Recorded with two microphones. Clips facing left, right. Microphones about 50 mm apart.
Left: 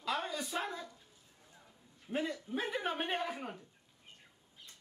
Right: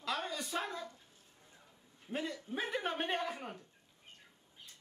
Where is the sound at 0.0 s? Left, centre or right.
Centre.